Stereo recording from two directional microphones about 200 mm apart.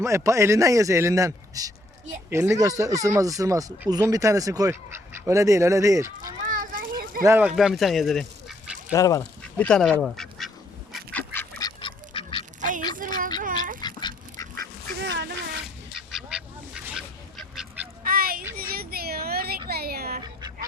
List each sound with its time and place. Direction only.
0.0 s speech: 15° right (ahead or behind)
6.4 s children playing: 45° right (ahead or behind)
7.2 s speech: 10° right (ahead or behind)
8.9 s speech: 15° left (ahead or behind)
9.4 s speech: 5° left (ahead or behind)
10.0 s duck: centre (ahead or behind)
11.6 s duck: 25° left (ahead or behind)
12.5 s a sound: 40° right (ahead or behind)
13.8 s duck: 20° left (ahead or behind)
14.5 s duck: 50° right (ahead or behind)
16.1 s duck: 5° right (ahead or behind)
18.0 s a sound: 45° right (ahead or behind)
20.2 s cat: 20° right (ahead or behind)